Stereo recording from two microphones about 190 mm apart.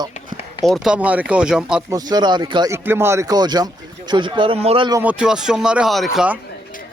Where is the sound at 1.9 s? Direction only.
20° right (ahead or behind).